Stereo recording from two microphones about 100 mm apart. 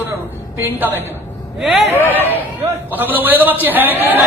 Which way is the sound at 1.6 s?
10° right (ahead or behind).